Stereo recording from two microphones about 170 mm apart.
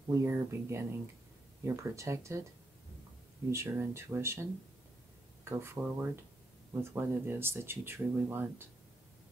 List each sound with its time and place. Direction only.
0.1 s speech: 15° right (ahead or behind)
3.4 s speech: 15° right (ahead or behind)